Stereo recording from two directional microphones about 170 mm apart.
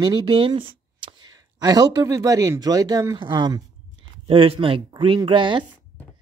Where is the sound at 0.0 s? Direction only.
25° right (ahead or behind).